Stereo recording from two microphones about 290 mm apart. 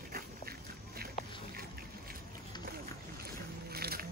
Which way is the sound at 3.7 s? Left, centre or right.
Right.